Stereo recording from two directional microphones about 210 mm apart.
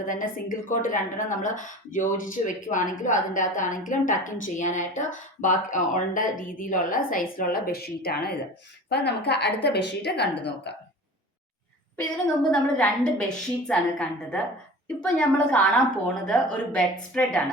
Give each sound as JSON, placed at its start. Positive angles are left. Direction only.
{"t": 0.1, "sound": "a woman's voice", "side_deg": 40}
{"t": 11.9, "sound": "a woman's voice", "side_deg": 5}